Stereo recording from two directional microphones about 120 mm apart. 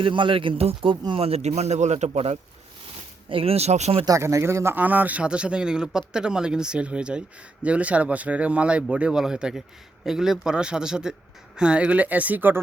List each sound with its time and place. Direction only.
0.0 s speech: 45° right (ahead or behind); by 2.4 s 65° right (ahead or behind)
3.2 s speech: 50° right (ahead or behind); by 4.0 s 70° right (ahead or behind)
4.0 s a man's voice: 25° right (ahead or behind)